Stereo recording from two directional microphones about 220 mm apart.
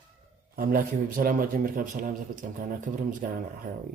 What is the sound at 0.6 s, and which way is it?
A man's voice, 40° right (ahead or behind).